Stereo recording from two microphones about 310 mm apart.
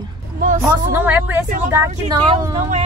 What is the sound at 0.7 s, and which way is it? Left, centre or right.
Speech, centre.